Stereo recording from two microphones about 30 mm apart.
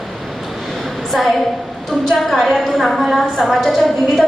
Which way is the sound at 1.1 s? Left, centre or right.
Centre.